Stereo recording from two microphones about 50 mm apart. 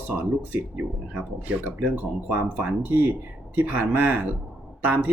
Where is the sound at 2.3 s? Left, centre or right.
Right.